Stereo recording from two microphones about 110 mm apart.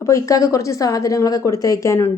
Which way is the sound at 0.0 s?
30° left (ahead or behind).